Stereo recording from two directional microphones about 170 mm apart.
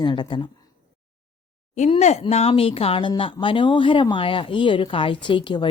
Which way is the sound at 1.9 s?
35° left (ahead or behind).